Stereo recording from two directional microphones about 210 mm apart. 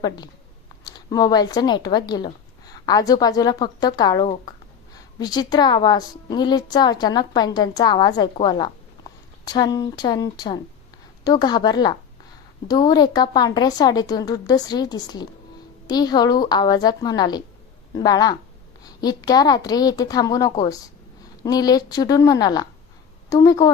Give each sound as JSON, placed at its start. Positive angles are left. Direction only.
{"t": 0.9, "sound": "a woman's voice", "side_deg": 20}